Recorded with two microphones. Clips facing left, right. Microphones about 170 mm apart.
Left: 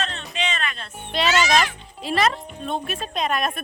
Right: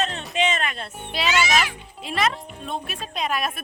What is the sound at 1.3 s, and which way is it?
A child's voice, 10° right (ahead or behind).